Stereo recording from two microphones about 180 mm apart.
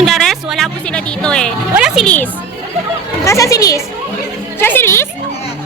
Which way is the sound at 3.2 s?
15° left (ahead or behind).